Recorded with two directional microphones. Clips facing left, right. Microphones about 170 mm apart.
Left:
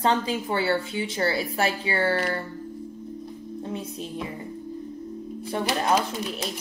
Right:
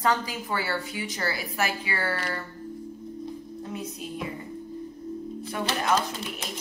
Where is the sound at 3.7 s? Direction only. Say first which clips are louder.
Left 2 dB; 30° left (ahead or behind).